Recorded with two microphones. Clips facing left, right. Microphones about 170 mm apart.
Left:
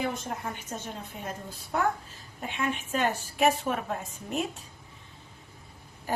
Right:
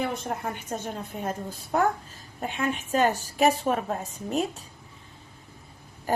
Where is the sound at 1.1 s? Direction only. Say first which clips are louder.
Right 8 dB; 45° right (ahead or behind).